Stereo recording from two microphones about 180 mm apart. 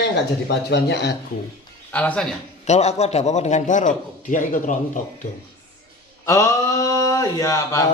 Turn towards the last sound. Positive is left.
turn(degrees=20)  # may be behind; listen again after turning